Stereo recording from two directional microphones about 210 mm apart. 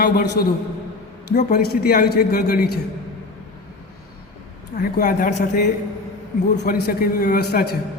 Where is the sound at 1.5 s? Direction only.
45° left (ahead or behind).